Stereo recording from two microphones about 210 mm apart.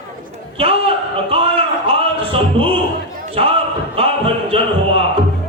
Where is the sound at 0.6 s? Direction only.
25° right (ahead or behind).